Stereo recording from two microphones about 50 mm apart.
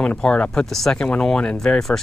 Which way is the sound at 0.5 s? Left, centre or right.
Centre.